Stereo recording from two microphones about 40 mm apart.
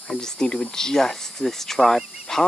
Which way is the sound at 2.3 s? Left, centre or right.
Centre.